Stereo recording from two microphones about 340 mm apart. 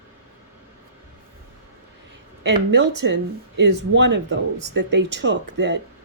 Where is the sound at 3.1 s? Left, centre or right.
Right.